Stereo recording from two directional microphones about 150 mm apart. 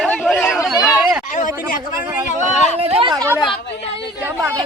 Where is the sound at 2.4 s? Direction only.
40° right (ahead or behind).